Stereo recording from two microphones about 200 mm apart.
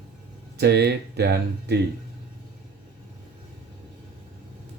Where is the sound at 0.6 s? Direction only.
55° right (ahead or behind).